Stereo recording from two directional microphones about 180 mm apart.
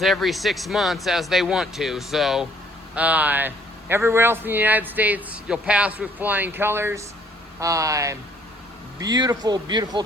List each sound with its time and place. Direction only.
0.0 s a man's voice: centre (ahead or behind); by 10.0 s 25° right (ahead or behind)